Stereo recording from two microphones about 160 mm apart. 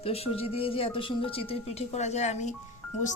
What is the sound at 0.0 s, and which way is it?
A woman's voice, 35° left (ahead or behind).